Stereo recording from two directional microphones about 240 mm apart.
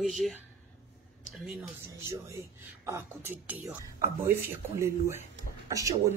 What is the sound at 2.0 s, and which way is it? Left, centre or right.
Speech, centre.